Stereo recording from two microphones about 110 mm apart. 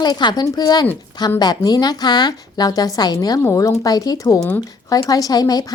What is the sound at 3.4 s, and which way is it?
A woman's voice, 25° left (ahead or behind).